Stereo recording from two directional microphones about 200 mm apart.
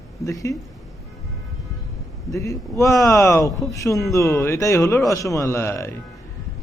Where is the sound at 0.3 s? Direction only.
15° left (ahead or behind).